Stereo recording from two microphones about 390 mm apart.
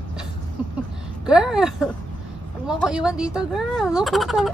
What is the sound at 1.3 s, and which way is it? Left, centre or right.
Speech, centre.